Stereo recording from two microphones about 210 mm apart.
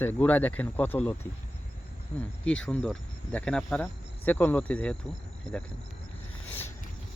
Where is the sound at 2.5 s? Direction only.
5° left (ahead or behind).